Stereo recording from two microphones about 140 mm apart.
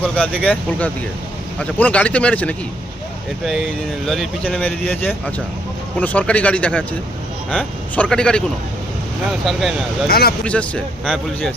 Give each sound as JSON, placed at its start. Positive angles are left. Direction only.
{"t": 0.0, "sound": "speech", "side_deg": 10}
{"t": 4.0, "sound": "speech", "side_deg": 0}
{"t": 9.5, "sound": "speech", "side_deg": 0}
{"t": 10.1, "sound": "speech", "side_deg": 90}
{"t": 10.4, "sound": "speech", "side_deg": 10}